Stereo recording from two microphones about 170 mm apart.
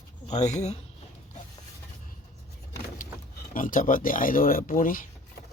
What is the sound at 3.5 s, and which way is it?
Speech, 50° left (ahead or behind).